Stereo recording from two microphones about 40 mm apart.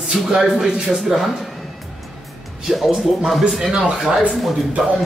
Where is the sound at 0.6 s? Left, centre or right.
Centre.